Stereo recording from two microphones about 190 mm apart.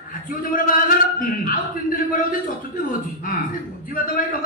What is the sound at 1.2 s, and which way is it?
Speech, 45° left (ahead or behind).